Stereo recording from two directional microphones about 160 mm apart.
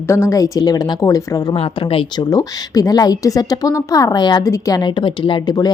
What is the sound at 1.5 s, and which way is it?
Speech, 35° left (ahead or behind).